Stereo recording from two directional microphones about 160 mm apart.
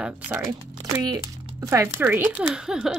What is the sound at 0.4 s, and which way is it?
Speech, 20° right (ahead or behind).